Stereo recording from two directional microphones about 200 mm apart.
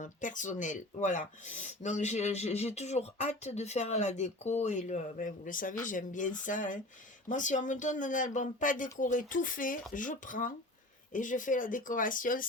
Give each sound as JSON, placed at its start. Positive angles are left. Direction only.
{"t": 0.0, "sound": "speech", "side_deg": 40}